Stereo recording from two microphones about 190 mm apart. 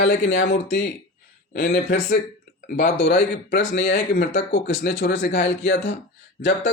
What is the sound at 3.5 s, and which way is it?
Speech, 70° left (ahead or behind).